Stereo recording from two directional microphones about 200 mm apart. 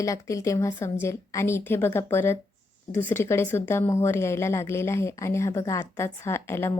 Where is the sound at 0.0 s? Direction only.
15° left (ahead or behind).